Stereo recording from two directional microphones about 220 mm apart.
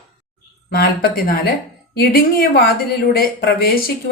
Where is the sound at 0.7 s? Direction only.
45° left (ahead or behind).